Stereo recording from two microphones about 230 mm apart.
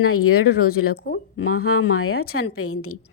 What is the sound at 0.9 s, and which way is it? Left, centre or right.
Speech, left.